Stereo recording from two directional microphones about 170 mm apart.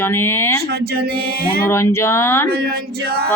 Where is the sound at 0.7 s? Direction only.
70° right (ahead or behind).